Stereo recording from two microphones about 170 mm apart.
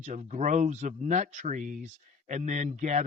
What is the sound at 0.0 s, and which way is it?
Speech, 45° right (ahead or behind).